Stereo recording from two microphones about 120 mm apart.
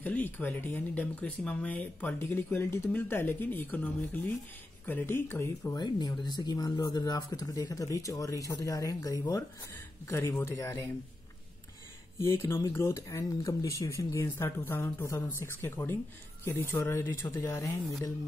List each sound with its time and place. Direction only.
0.0 s speech: 15° left (ahead or behind)
5.8 s speech: 35° left (ahead or behind)
12.2 s speech: 20° left (ahead or behind)